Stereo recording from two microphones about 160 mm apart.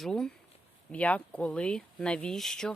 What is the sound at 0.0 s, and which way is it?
Speech, 5° left (ahead or behind).